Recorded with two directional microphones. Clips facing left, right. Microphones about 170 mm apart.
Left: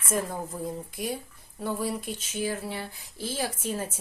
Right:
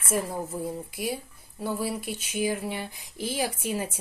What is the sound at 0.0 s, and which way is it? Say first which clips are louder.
A woman's voice: right 1 dB; 5° right (ahead or behind).